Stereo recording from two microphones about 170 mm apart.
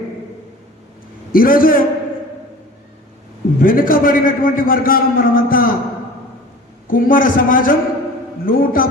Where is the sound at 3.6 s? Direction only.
55° left (ahead or behind).